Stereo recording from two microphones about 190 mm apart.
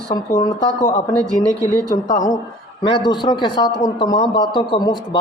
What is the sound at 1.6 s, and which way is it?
Speech, 20° right (ahead or behind).